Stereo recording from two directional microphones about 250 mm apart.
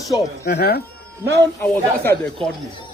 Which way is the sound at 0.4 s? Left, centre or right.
Left.